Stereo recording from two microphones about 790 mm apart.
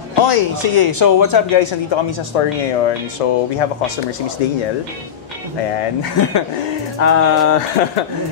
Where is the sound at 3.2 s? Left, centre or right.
Left.